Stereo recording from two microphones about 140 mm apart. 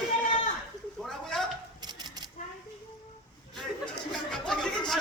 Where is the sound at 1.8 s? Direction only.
30° right (ahead or behind).